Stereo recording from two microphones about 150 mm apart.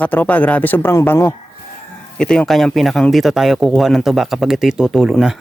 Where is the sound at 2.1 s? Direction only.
5° left (ahead or behind).